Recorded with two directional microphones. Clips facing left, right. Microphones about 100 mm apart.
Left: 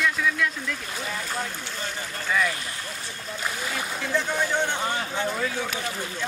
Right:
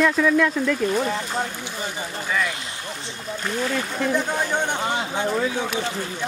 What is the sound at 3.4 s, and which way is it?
Speech, 5° left (ahead or behind).